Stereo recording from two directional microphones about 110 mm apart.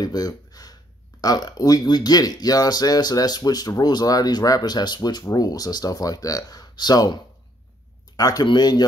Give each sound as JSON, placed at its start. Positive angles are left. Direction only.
{"t": 0.0, "sound": "speech", "side_deg": 35}
{"t": 8.2, "sound": "speech", "side_deg": 35}